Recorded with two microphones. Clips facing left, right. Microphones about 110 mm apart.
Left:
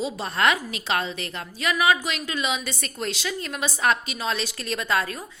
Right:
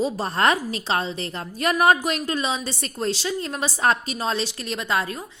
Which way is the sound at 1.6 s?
45° right (ahead or behind).